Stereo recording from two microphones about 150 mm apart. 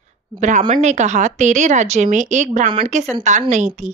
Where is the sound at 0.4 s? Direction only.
55° right (ahead or behind).